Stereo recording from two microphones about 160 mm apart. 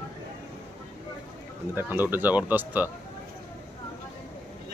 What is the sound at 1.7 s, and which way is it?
Speech, 10° right (ahead or behind).